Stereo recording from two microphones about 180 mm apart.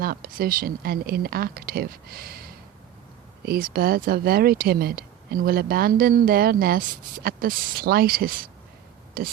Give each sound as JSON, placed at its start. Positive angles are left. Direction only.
{"t": 0.0, "sound": "speech", "side_deg": -55}